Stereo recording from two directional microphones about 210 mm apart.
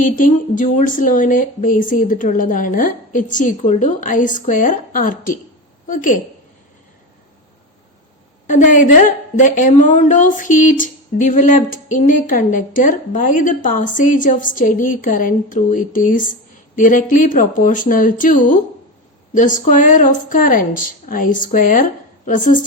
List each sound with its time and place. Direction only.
0.0 s a woman's voice: 40° left (ahead or behind)
8.4 s a woman's voice: 35° left (ahead or behind)